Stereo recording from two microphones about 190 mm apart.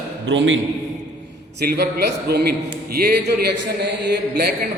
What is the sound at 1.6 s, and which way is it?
A man's voice, 55° right (ahead or behind).